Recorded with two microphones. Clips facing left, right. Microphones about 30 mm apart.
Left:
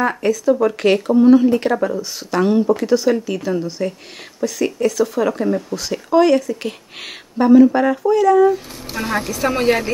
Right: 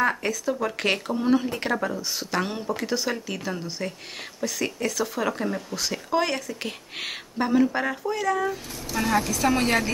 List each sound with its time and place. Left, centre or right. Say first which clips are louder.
0.0 s speech: left 7 dB; centre
8.9 s speech: left 2 dB; left